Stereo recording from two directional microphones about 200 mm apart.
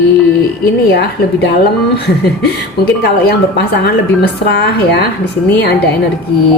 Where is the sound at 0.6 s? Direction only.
55° left (ahead or behind).